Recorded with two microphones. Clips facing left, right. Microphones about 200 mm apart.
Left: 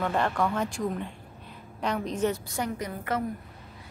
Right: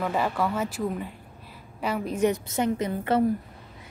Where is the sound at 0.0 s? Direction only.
5° right (ahead or behind).